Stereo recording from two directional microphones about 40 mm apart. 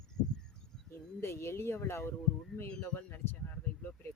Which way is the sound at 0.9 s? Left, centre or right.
Left.